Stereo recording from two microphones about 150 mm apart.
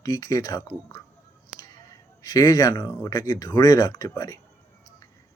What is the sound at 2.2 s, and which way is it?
Speech, 25° left (ahead or behind).